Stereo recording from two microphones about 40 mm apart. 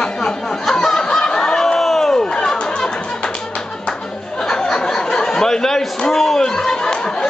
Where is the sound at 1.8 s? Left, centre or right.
Centre.